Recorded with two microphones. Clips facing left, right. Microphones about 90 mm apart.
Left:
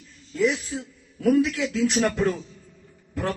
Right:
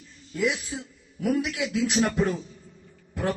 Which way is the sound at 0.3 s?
15° right (ahead or behind).